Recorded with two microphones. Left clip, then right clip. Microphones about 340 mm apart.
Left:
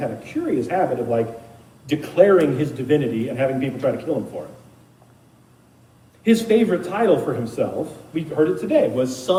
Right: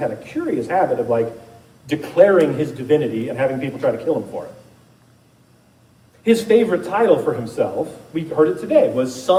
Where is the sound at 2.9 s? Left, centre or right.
Right.